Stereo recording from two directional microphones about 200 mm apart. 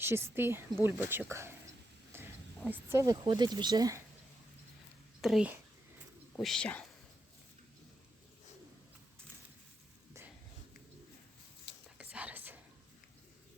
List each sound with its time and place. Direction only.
0.0 s speech: 10° right (ahead or behind)
2.6 s speech: 10° right (ahead or behind)
5.2 s speech: 5° right (ahead or behind)
11.9 s whispering: 5° right (ahead or behind)